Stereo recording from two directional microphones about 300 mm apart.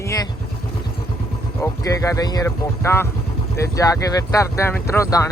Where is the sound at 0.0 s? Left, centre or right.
Centre.